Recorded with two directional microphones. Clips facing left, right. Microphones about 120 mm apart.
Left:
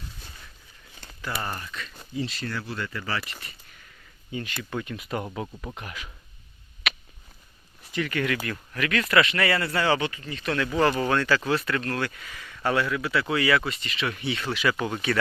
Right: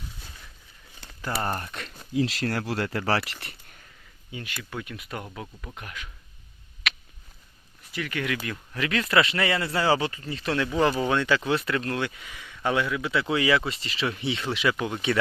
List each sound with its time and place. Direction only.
1.2 s speech: 30° right (ahead or behind)
1.5 s speech: 60° right (ahead or behind)
2.1 s speech: 90° right; by 3.5 s 70° right (ahead or behind)
4.3 s speech: 10° right (ahead or behind)
5.2 s speech: 10° left (ahead or behind)
7.9 s speech: 10° right (ahead or behind)
8.8 s speech: 25° right (ahead or behind)
10.7 s speech: 10° right (ahead or behind)
14.8 s speech: 5° right (ahead or behind)